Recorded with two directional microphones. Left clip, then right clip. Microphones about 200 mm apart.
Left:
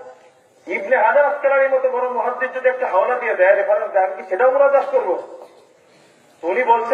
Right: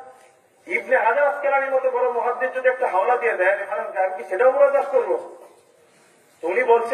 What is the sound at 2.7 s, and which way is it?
Speech, 40° left (ahead or behind).